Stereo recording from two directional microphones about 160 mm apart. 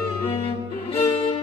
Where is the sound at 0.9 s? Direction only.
35° left (ahead or behind).